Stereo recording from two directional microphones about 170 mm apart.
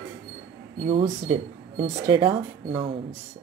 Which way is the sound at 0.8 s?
35° right (ahead or behind).